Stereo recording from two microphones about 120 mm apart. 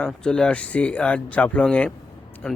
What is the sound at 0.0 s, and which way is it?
Speech, 5° left (ahead or behind).